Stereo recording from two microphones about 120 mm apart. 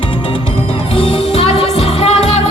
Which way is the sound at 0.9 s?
50° left (ahead or behind).